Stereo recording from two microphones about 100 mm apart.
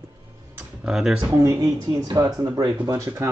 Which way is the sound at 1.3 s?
35° right (ahead or behind).